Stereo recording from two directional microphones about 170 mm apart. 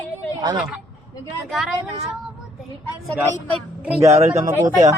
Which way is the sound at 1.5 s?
Centre (ahead or behind).